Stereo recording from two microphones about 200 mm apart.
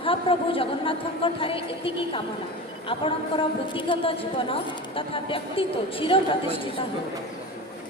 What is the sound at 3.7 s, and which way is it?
A woman's voice, 25° left (ahead or behind).